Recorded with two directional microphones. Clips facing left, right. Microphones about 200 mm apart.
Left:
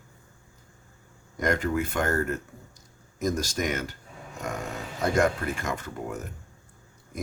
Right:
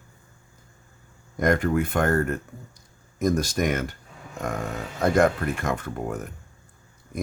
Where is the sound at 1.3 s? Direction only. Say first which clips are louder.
Right 4 dB; 55° right (ahead or behind).